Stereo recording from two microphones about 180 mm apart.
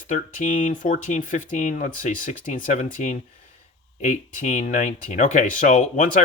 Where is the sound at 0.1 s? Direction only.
45° left (ahead or behind).